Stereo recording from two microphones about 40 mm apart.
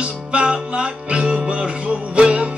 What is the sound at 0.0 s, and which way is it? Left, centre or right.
Music, right.